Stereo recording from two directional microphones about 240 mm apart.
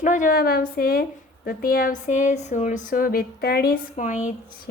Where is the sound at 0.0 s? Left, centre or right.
Left.